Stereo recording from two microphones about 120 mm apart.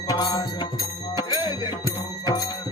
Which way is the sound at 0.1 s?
35° left (ahead or behind).